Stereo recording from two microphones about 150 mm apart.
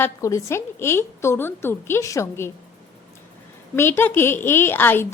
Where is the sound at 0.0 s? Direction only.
20° left (ahead or behind).